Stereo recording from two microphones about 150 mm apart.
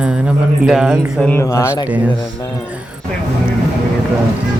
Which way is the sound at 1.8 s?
10° right (ahead or behind).